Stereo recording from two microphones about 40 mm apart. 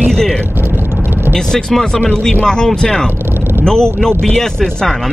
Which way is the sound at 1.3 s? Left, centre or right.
Centre.